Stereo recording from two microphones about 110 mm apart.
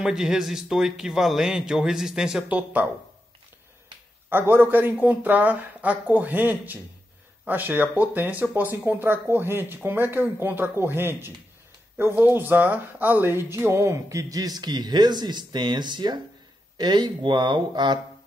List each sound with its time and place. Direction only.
0.0 s speech: 5° right (ahead or behind)
4.3 s speech: 20° right (ahead or behind); by 17.9 s 45° right (ahead or behind)